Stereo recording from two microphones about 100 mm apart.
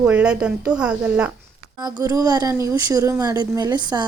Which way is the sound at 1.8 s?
35° right (ahead or behind).